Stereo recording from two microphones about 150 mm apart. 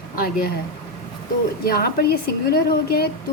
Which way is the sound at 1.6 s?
90° left.